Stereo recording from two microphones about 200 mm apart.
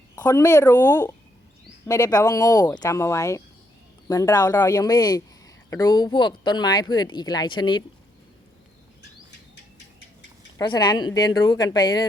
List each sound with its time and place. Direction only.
0.2 s speech: 15° left (ahead or behind)
10.6 s speech: 20° left (ahead or behind)